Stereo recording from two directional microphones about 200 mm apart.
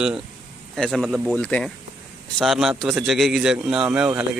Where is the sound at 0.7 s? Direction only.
Centre (ahead or behind).